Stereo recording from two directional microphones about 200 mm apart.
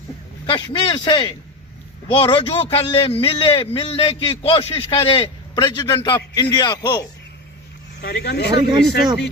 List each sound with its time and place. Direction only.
0.4 s a man's voice: 25° left (ahead or behind)
8.0 s speech: 55° left (ahead or behind)